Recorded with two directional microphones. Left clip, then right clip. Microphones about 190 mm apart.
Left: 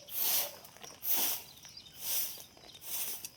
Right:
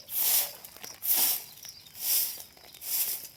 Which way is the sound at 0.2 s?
40° right (ahead or behind).